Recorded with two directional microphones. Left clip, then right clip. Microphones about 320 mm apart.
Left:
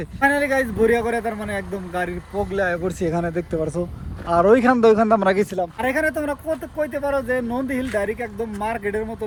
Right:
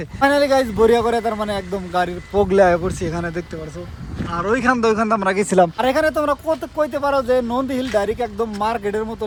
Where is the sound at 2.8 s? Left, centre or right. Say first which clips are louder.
Left 1 dB; centre.